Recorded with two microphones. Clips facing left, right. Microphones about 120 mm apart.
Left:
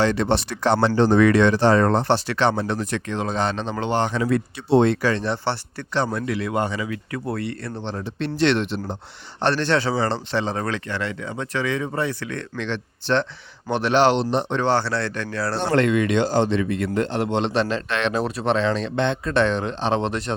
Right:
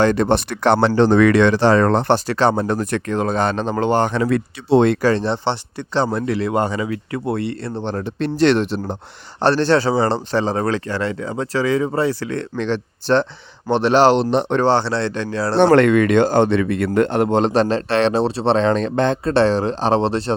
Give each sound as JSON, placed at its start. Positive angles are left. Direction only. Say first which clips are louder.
{"t": 0.0, "sound": "speech", "louder": "right 4 dB", "side_deg": -50}
{"t": 2.0, "sound": "speech", "louder": "right 4 dB", "side_deg": -45}
{"t": 5.0, "sound": "a man's voice", "louder": "right 5 dB", "side_deg": -30}
{"t": 7.8, "sound": "speech", "louder": "right 6 dB", "side_deg": -50}
{"t": 14.2, "sound": "speech", "louder": "right 5 dB", "side_deg": -65}
{"t": 14.6, "sound": "a man's voice", "louder": "right 4 dB", "side_deg": -25}
{"t": 15.5, "sound": "speech", "louder": "right 8 dB", "side_deg": -65}